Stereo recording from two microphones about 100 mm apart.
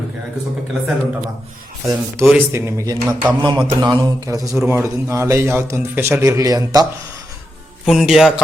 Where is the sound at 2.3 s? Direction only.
25° right (ahead or behind).